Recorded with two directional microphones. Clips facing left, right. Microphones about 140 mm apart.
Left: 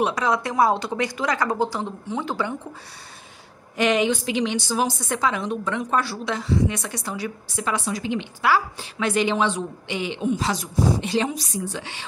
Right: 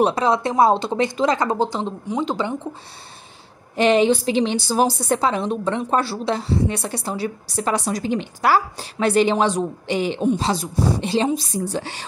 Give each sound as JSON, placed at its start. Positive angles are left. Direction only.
{"t": 0.0, "sound": "speech", "side_deg": -30}
{"t": 3.7, "sound": "a woman's voice", "side_deg": -30}